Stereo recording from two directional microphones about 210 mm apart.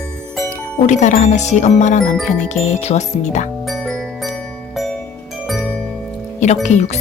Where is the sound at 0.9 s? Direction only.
35° left (ahead or behind).